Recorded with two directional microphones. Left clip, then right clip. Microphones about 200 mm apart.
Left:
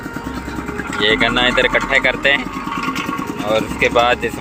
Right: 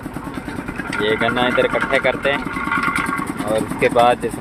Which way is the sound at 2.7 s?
25° left (ahead or behind).